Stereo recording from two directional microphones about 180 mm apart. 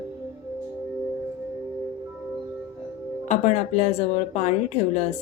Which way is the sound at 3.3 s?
40° left (ahead or behind).